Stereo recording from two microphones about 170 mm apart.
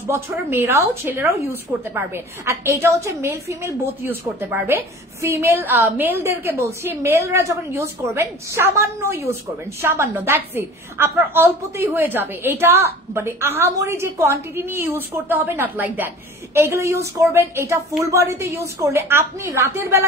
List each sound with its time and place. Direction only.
0.0 s a woman's voice: 15° right (ahead or behind)